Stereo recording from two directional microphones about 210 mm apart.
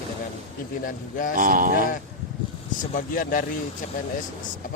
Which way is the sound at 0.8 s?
40° left (ahead or behind).